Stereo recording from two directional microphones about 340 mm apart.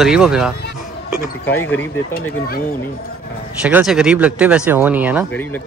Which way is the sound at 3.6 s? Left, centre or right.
Centre.